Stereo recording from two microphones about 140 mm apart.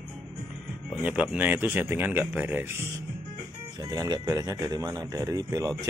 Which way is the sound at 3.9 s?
25° right (ahead or behind).